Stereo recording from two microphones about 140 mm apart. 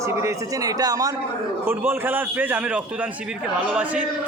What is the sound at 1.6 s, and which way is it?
A man's voice, 15° right (ahead or behind).